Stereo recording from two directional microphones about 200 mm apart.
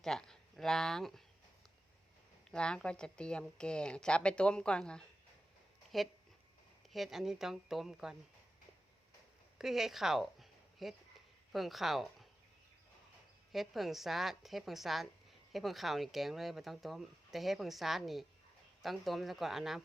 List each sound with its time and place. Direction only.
0.0 s speech: 5° left (ahead or behind)
2.5 s a woman's voice: 5° left (ahead or behind)
9.6 s a woman's voice: centre (ahead or behind)
13.5 s a woman's voice: centre (ahead or behind)